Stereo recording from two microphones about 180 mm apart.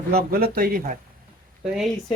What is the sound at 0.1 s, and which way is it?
Speech, 55° right (ahead or behind).